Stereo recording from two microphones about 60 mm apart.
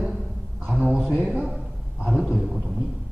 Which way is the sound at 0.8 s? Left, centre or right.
Centre.